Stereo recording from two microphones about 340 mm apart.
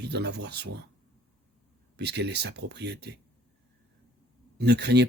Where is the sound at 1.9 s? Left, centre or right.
Right.